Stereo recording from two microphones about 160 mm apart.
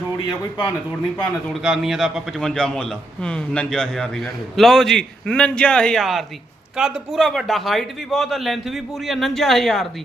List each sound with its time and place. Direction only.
0.3 s a man's voice: 25° left (ahead or behind)
1.6 s a man's voice: centre (ahead or behind)